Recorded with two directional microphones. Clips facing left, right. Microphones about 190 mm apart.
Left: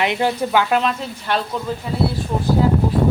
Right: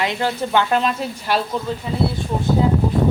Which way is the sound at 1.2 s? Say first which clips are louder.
Even; 5° right (ahead or behind).